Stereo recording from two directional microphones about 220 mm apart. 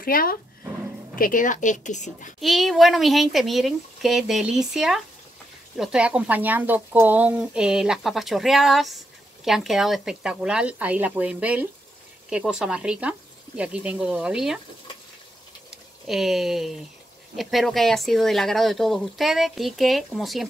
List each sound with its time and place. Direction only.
0.0 s a woman's voice: 40° left (ahead or behind)
2.4 s speech: centre (ahead or behind)
15.7 s speech: centre (ahead or behind)